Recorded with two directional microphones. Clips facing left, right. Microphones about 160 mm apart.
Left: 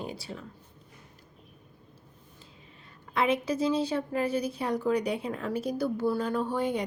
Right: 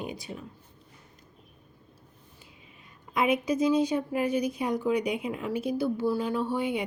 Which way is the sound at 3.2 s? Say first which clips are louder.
Right 2 dB; 15° right (ahead or behind).